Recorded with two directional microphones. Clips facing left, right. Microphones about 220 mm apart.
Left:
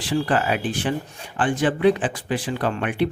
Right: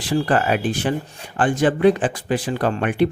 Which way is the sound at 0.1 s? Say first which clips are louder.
Right 3 dB; 45° right (ahead or behind).